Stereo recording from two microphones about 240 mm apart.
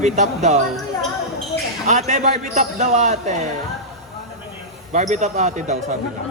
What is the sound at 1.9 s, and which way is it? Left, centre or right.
Speech, right.